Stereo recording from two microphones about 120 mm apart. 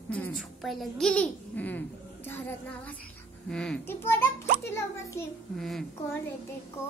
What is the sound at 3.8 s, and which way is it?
Speech, 20° left (ahead or behind).